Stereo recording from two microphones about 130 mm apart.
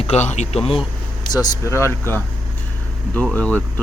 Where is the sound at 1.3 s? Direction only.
25° left (ahead or behind).